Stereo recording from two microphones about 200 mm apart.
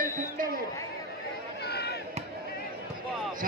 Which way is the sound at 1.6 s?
55° left (ahead or behind).